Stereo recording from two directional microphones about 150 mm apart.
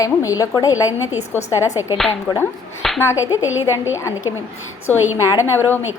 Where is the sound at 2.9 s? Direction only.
20° left (ahead or behind).